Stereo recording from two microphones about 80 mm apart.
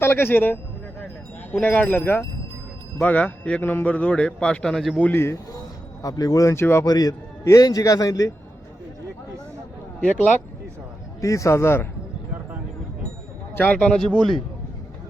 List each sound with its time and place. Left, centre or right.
0.0 s speech: left
1.6 s a man's voice: left; by 4.9 s centre
5.1 s a man's voice: left
6.0 s a man's voice: left
6.8 s a man's voice: left
10.0 s speech: left
11.2 s a man's voice: left
13.6 s a man's voice: centre